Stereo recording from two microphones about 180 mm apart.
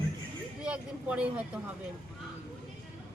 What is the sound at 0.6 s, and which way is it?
Vehicle, 5° right (ahead or behind).